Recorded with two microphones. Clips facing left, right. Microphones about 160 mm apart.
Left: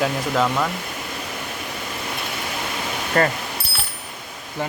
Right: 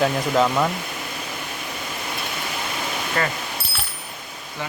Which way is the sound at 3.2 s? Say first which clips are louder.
Left 6 dB; 40° left (ahead or behind).